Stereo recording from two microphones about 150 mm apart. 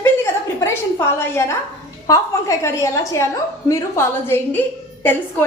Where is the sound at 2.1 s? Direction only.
20° left (ahead or behind).